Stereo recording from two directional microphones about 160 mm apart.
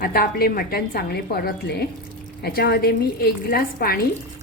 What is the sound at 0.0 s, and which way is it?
A woman's voice, 70° left (ahead or behind).